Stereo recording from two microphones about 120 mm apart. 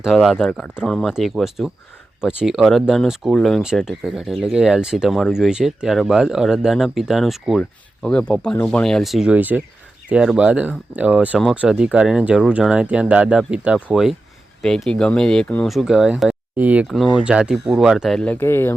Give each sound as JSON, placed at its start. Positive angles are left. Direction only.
{"t": 0.0, "sound": "speech", "side_deg": 0}
{"t": 7.6, "sound": "speech", "side_deg": 10}
{"t": 15.6, "sound": "speech", "side_deg": 0}
{"t": 16.8, "sound": "speech", "side_deg": 0}
{"t": 18.2, "sound": "speech", "side_deg": 10}